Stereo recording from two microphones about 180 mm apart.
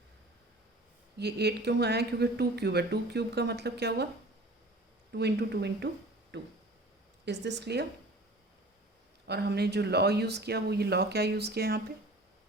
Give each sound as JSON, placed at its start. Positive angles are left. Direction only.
{"t": 1.2, "sound": "speech", "side_deg": -65}
{"t": 5.1, "sound": "speech", "side_deg": -65}
{"t": 9.2, "sound": "speech", "side_deg": -65}